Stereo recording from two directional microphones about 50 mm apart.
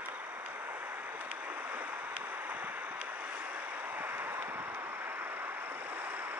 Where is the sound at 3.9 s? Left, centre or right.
Right.